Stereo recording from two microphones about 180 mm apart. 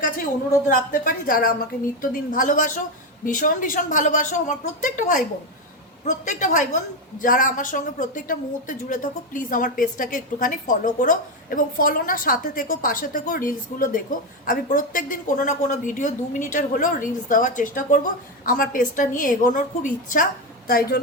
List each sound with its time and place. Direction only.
0.7 s a woman's voice: 50° left (ahead or behind)